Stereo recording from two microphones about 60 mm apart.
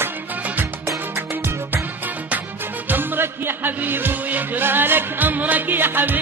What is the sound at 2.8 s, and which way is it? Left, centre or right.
Music, right.